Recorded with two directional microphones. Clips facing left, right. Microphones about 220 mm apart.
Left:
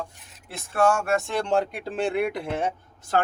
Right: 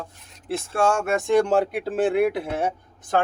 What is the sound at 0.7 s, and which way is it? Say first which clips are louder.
Speech: even; 25° right (ahead or behind).